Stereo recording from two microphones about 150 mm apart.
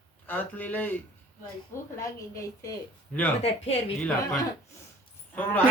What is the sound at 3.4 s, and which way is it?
Speech, 45° left (ahead or behind).